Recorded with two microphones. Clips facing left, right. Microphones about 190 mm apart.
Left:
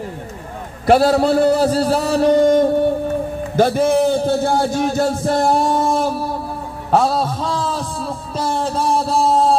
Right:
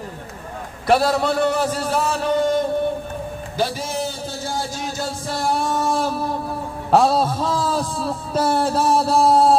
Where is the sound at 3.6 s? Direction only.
55° left (ahead or behind).